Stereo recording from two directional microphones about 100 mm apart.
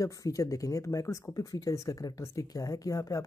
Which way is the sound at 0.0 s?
35° left (ahead or behind).